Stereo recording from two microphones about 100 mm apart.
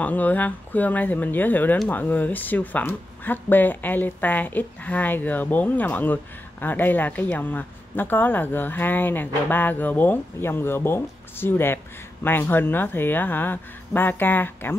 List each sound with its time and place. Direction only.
0.0 s speech: 15° left (ahead or behind)